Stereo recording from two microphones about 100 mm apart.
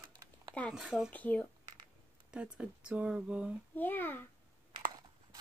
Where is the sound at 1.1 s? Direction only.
15° left (ahead or behind).